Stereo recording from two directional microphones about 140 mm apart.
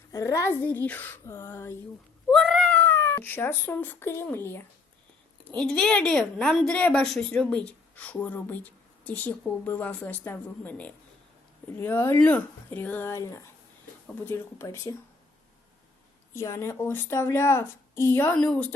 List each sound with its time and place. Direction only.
0.1 s a woman's voice: 25° left (ahead or behind)
2.3 s speech: 5° left (ahead or behind)
5.5 s a woman's voice: 5° left (ahead or behind)
16.3 s a woman's voice: 20° left (ahead or behind)